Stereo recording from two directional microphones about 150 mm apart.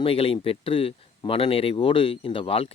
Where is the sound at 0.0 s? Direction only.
35° left (ahead or behind).